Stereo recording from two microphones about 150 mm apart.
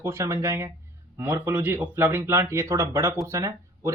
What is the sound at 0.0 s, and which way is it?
Speech, 15° right (ahead or behind).